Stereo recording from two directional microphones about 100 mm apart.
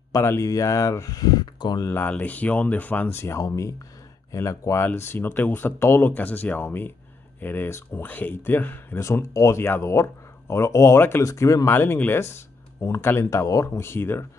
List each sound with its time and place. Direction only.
0.1 s speech: 30° left (ahead or behind)
1.9 s speech: 20° left (ahead or behind)